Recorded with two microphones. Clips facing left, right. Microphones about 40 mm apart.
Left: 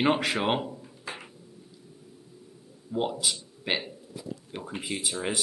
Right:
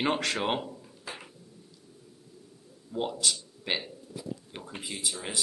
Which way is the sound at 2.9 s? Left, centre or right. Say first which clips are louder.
Left 2 dB; centre.